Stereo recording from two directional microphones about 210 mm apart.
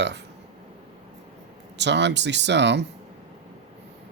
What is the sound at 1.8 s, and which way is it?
Speech, 55° right (ahead or behind).